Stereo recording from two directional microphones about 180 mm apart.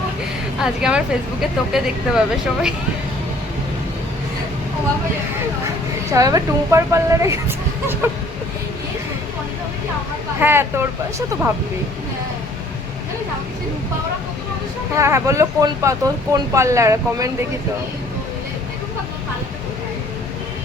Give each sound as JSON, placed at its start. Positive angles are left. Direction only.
{"t": 0.6, "sound": "speech", "side_deg": -5}
{"t": 6.1, "sound": "speech", "side_deg": -20}
{"t": 10.4, "sound": "speech", "side_deg": -15}
{"t": 14.9, "sound": "speech", "side_deg": -15}